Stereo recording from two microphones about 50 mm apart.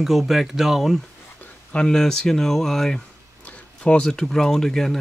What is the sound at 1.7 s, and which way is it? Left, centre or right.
Speech, centre.